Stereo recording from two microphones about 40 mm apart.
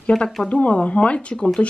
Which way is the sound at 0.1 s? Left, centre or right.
Centre.